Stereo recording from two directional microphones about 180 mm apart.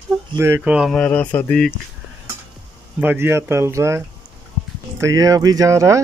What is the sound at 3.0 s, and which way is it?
Speech, 10° right (ahead or behind).